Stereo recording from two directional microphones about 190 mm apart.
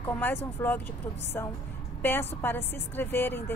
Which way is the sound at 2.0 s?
10° left (ahead or behind).